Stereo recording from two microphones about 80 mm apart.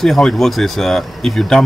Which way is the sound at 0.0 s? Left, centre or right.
Centre.